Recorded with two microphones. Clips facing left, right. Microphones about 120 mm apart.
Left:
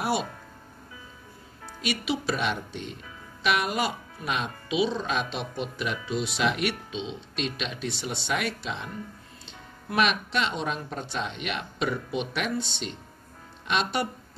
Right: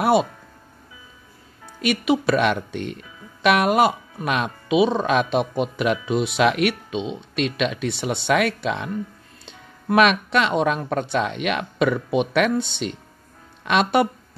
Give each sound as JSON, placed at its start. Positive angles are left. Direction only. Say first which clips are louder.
{"t": 1.8, "sound": "speech", "louder": "right 9 dB", "side_deg": -55}